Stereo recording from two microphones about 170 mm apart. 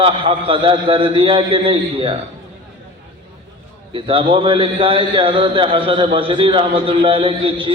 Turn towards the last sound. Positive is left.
turn(degrees=-30)  # may be behind; listen again after turning